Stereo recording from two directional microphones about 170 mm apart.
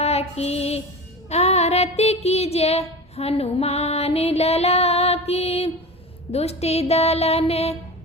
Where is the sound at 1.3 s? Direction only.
40° left (ahead or behind).